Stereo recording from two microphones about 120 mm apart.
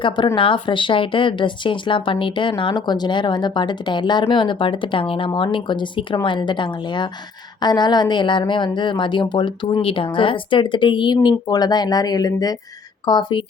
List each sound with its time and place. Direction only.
0.3 s speech: 45° left (ahead or behind)